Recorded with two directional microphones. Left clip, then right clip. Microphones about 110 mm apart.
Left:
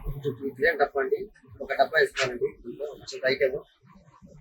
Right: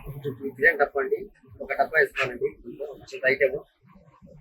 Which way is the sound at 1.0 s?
15° right (ahead or behind).